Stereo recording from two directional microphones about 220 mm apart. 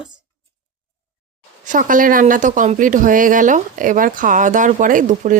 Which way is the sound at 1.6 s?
35° right (ahead or behind).